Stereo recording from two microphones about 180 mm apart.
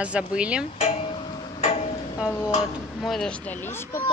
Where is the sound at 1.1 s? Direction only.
25° left (ahead or behind).